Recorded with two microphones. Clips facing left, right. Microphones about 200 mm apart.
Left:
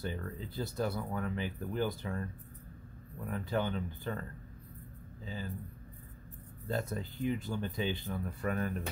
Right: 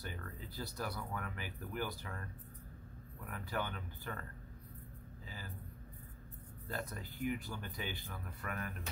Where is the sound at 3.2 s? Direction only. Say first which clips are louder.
Left 7 dB; 25° left (ahead or behind).